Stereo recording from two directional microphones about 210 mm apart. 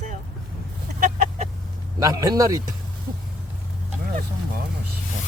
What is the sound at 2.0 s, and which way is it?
Speech, 15° right (ahead or behind).